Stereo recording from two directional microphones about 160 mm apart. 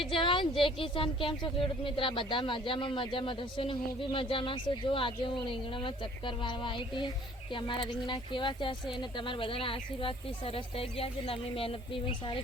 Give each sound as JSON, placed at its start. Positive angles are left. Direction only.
{"t": 0.1, "sound": "a woman's voice", "side_deg": 30}